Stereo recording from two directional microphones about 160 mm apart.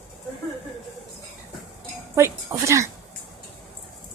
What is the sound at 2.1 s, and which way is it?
Speech, 20° right (ahead or behind).